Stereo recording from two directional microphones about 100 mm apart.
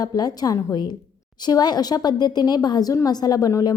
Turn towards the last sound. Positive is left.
turn(degrees=35)  # may be behind; listen again after turning